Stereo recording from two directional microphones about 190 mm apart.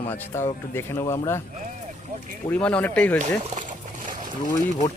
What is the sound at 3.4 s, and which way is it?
Trickle, 40° right (ahead or behind).